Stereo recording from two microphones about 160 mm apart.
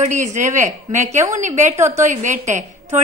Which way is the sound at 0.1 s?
50° right (ahead or behind).